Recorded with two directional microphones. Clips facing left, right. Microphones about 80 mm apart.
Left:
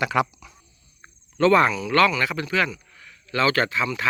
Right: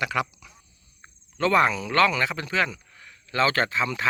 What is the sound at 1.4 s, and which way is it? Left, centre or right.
Speech, centre.